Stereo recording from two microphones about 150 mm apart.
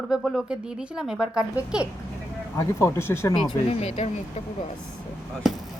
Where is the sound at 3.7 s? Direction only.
45° left (ahead or behind).